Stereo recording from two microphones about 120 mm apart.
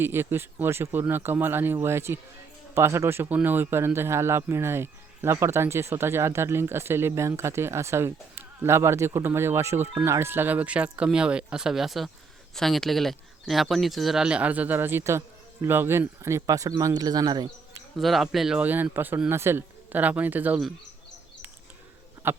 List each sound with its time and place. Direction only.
0.0 s speech: 20° right (ahead or behind); by 17.8 s 35° right (ahead or behind)
17.9 s speech: centre (ahead or behind)
22.2 s speech: 15° right (ahead or behind)